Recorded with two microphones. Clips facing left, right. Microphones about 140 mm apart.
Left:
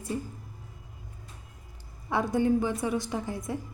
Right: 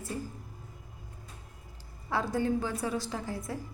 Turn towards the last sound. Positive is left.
turn(degrees=20)  # may be behind; listen again after turning